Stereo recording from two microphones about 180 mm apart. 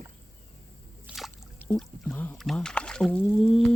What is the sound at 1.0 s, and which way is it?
Speech, centre (ahead or behind).